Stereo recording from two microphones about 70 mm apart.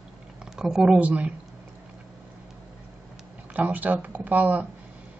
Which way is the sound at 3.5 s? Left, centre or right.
Right.